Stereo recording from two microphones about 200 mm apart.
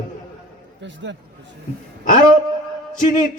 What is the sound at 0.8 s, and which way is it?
Speech, 65° right (ahead or behind).